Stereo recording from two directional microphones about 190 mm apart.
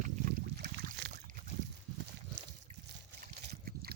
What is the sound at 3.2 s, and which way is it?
Trickle, 50° right (ahead or behind).